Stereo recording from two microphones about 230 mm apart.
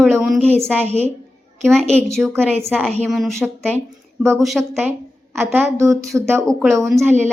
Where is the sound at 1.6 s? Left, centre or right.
Centre.